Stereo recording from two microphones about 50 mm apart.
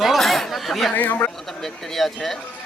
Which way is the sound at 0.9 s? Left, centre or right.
Left.